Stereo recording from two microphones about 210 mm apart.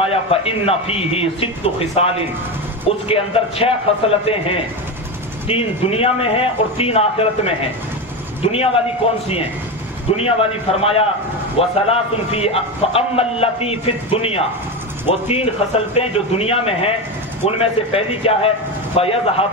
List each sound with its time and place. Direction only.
0.0 s a man's voice: 30° left (ahead or behind)